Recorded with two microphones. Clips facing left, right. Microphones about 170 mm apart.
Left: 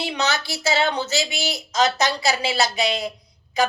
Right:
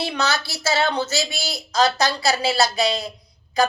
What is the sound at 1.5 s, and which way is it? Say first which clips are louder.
Speech: right 2 dB; 35° right (ahead or behind).